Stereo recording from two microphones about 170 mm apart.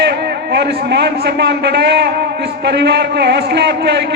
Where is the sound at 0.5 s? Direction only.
85° right.